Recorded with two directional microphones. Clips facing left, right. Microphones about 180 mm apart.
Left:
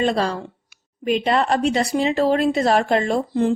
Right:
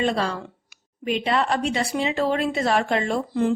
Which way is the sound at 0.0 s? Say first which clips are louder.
Left 3 dB; 40° left (ahead or behind).